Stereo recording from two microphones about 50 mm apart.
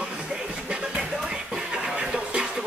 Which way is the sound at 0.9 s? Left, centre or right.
Centre.